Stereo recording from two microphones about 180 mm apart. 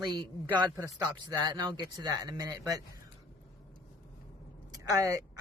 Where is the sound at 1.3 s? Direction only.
20° right (ahead or behind).